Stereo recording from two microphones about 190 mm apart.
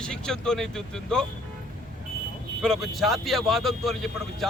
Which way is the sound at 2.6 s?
Centre (ahead or behind).